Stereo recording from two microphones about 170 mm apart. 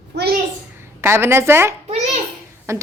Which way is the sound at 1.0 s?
15° right (ahead or behind).